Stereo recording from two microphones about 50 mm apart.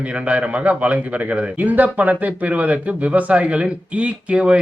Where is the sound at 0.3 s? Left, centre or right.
Right.